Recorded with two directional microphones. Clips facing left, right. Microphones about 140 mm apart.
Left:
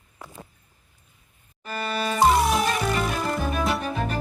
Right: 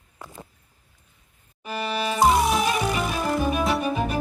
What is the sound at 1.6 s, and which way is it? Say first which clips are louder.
Music: right 1 dB; 10° right (ahead or behind).